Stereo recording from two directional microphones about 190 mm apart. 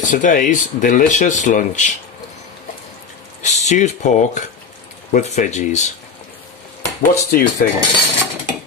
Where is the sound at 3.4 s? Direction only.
35° left (ahead or behind).